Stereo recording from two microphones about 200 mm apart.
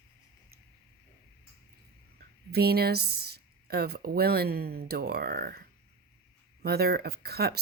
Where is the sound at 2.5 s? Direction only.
50° right (ahead or behind).